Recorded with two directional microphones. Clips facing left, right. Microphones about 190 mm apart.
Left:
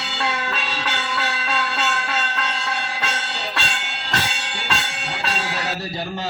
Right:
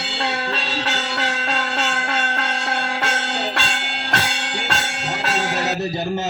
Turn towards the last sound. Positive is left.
turn(degrees=-45)  # may be behind; listen again after turning